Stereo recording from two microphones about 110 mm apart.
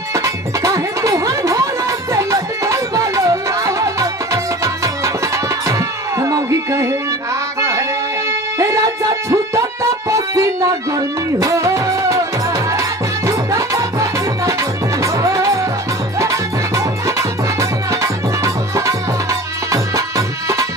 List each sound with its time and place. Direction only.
0.1 s music: 30° right (ahead or behind)
8.5 s music: 30° right (ahead or behind)
13.3 s music: 30° right (ahead or behind)